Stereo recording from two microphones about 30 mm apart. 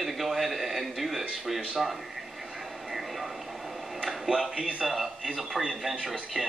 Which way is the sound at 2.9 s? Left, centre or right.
Centre.